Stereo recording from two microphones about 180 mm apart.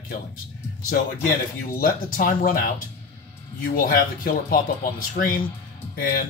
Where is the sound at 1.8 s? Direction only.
55° left (ahead or behind).